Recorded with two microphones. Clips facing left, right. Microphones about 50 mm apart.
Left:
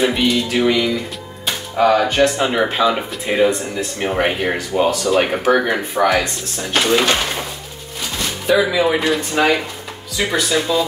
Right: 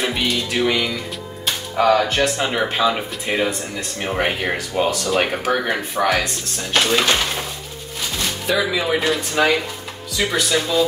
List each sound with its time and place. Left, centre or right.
0.0 s speech: centre
8.5 s speech: centre